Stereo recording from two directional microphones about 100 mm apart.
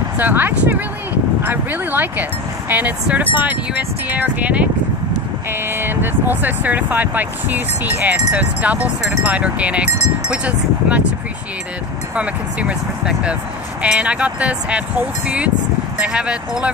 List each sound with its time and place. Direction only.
0.2 s speech: 20° right (ahead or behind)
9.8 s wind chime: 90° left
10.3 s speech: 15° right (ahead or behind)
12.2 s speech: 15° right (ahead or behind)